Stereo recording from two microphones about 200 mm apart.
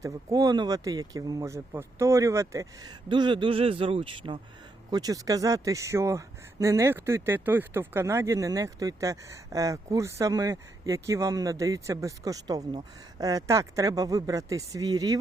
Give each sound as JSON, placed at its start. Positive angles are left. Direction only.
{"t": 0.0, "sound": "speech", "side_deg": -15}